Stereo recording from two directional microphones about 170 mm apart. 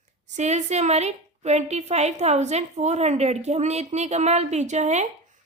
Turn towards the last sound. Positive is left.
turn(degrees=-40)  # may be behind; listen again after turning